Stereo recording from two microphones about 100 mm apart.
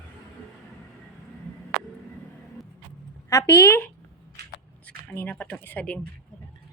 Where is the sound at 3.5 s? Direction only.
30° left (ahead or behind).